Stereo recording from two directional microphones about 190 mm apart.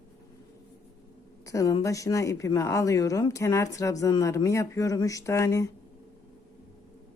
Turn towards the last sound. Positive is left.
turn(degrees=15)  # may be behind; listen again after turning